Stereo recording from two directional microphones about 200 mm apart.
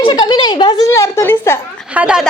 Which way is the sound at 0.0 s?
20° left (ahead or behind).